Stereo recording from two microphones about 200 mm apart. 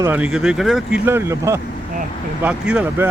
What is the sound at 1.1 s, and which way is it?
Speech, 10° right (ahead or behind).